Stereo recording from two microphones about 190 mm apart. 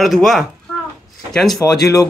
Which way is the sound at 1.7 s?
20° left (ahead or behind).